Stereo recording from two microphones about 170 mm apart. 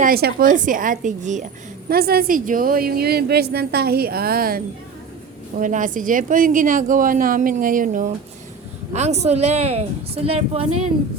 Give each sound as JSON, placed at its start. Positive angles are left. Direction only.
{"t": 0.0, "sound": "a woman's voice", "side_deg": -65}
{"t": 1.9, "sound": "a woman's voice", "side_deg": -65}
{"t": 5.5, "sound": "a woman's voice", "side_deg": -50}
{"t": 8.9, "sound": "speech", "side_deg": -40}